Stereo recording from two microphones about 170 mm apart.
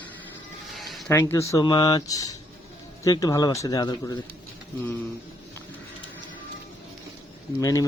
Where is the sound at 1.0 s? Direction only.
15° left (ahead or behind).